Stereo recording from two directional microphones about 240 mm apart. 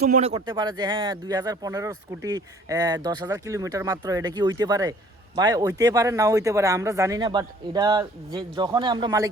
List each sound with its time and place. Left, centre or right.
0.0 s speech: right